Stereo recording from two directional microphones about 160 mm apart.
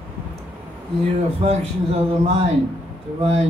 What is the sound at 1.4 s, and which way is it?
A man's voice, 40° right (ahead or behind).